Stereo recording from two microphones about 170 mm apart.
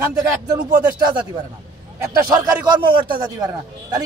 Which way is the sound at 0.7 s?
25° right (ahead or behind).